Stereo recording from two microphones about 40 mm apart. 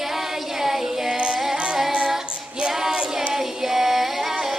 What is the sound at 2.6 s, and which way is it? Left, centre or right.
Music, centre.